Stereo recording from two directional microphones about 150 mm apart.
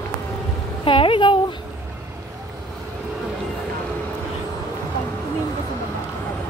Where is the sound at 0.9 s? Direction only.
35° left (ahead or behind).